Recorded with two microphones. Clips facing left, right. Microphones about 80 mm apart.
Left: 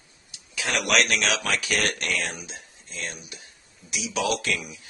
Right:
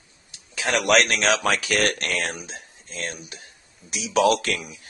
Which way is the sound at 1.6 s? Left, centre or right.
Right.